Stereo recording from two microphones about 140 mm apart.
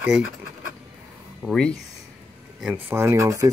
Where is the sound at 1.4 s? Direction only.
5° left (ahead or behind).